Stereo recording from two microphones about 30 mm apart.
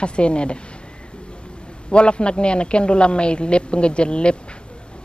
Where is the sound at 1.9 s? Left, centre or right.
Left.